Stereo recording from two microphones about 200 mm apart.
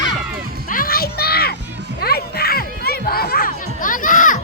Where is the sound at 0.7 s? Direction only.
45° left (ahead or behind).